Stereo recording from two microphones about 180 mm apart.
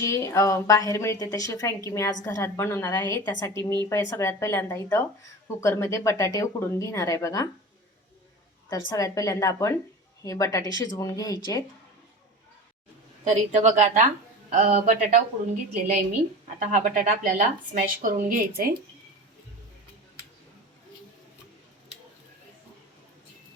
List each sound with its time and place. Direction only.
0.0 s a woman's voice: 15° left (ahead or behind)
8.9 s a woman's voice: 20° left (ahead or behind)
13.2 s a woman's voice: 40° right (ahead or behind)
16.6 s speech: 45° right (ahead or behind)